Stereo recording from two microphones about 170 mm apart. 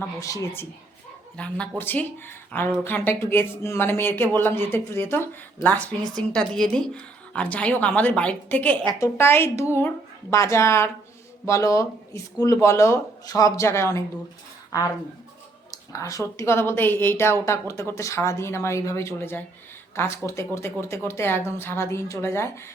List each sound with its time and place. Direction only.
0.2 s speech: 20° left (ahead or behind)
15.7 s speech: 20° left (ahead or behind)